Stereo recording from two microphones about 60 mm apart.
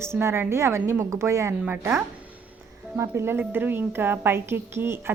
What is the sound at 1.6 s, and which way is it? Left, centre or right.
Speech, right.